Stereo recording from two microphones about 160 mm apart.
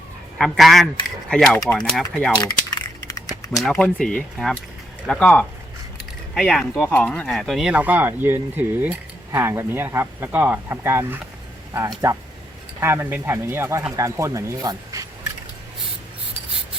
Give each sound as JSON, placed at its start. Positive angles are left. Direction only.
{"t": 0.3, "sound": "speech", "side_deg": 0}
{"t": 2.3, "sound": "typing", "side_deg": 25}
{"t": 3.2, "sound": "speech", "side_deg": 0}